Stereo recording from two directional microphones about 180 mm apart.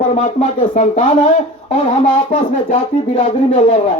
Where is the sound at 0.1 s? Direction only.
40° left (ahead or behind).